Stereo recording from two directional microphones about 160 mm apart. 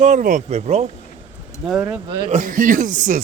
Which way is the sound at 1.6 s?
5° right (ahead or behind).